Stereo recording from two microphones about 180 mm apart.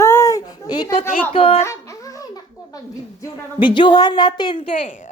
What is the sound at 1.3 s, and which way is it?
Speech, 35° left (ahead or behind).